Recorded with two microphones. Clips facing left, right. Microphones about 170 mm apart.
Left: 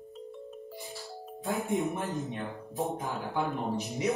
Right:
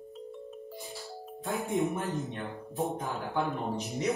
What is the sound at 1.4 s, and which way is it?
Speech, centre (ahead or behind).